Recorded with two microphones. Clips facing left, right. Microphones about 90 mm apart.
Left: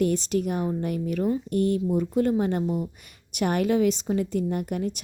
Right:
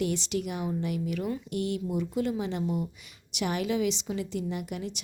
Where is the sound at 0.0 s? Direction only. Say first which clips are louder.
Left 6 dB; 40° left (ahead or behind).